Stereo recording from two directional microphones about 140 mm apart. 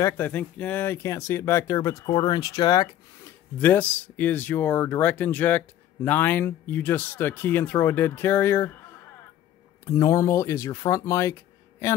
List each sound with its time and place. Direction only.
0.0 s speech: 10° left (ahead or behind)
3.6 s speech: 10° left (ahead or behind)
9.8 s speech: 20° left (ahead or behind)